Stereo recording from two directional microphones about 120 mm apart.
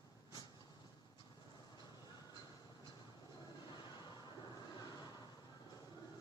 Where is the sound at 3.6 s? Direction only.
35° left (ahead or behind).